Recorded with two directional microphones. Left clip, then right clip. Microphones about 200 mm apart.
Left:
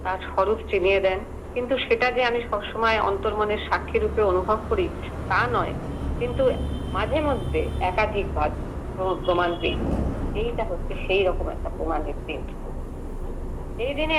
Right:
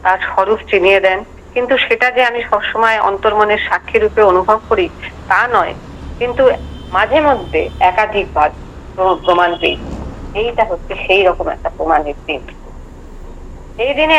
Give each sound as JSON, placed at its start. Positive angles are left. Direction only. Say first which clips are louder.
{"t": 0.0, "sound": "speech", "louder": "right 11 dB", "side_deg": -45}
{"t": 13.7, "sound": "speech", "louder": "right 13 dB", "side_deg": -45}